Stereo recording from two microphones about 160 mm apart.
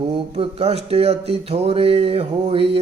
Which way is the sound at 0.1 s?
40° right (ahead or behind).